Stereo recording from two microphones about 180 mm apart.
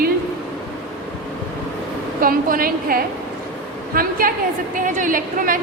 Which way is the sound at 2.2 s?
55° right (ahead or behind).